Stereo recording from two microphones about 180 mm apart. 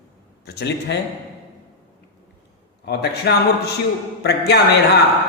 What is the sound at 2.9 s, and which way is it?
A man's voice, 65° left (ahead or behind).